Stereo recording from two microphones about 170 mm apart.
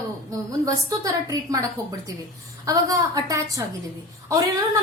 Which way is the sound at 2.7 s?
20° right (ahead or behind).